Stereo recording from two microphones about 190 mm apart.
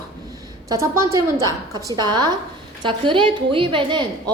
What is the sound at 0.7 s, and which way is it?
A woman's voice, 15° right (ahead or behind).